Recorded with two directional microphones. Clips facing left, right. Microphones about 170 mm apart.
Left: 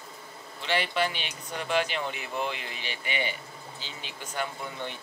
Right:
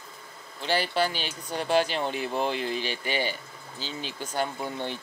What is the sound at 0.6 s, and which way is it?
Speech, 35° right (ahead or behind).